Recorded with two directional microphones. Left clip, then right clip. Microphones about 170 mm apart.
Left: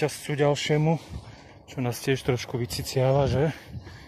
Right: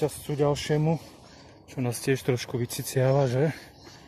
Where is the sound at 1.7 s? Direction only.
15° right (ahead or behind).